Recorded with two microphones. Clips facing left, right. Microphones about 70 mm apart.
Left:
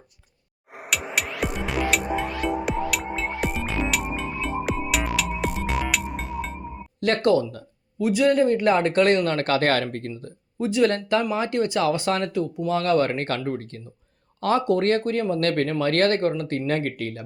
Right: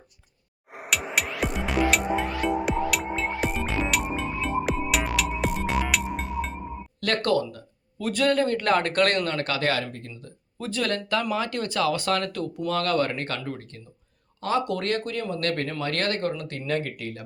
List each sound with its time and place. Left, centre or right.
0.7 s music: centre
7.0 s a man's voice: left
9.2 s speech: left
10.1 s speech: left
10.6 s a man's voice: centre; by 13.8 s left
14.6 s speech: left